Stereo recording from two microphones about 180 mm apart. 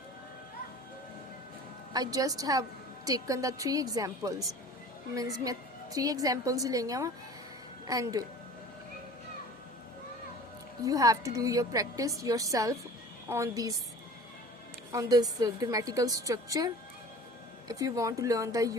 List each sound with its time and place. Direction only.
1.9 s a woman's voice: 20° right (ahead or behind)
10.8 s a woman's voice: 20° right (ahead or behind)
14.9 s a woman's voice: 20° right (ahead or behind)